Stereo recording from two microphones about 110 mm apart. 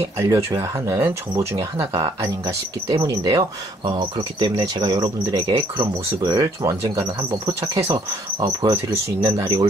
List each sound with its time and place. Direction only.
0.2 s speech: 30° right (ahead or behind)
7.0 s insect: 40° right (ahead or behind)